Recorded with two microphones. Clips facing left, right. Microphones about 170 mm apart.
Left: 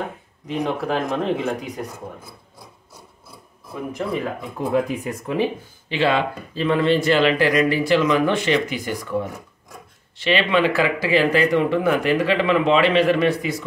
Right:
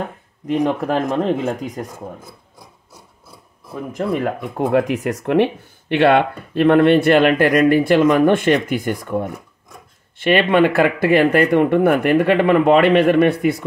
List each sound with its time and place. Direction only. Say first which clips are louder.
0.9 s speech: right 4 dB; 45° right (ahead or behind)
3.9 s speech: right 5 dB; 55° right (ahead or behind)